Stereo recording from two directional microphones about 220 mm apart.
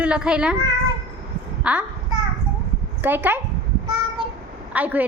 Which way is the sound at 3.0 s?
10° right (ahead or behind).